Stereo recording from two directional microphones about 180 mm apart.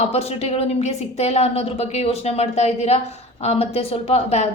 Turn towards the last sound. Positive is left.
turn(degrees=35)  # may be behind; listen again after turning